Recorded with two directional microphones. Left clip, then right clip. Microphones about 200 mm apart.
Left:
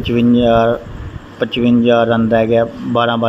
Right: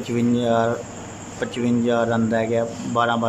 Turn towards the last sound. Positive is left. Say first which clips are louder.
# left 5 dB
turn(degrees=10)  # may be behind; listen again after turning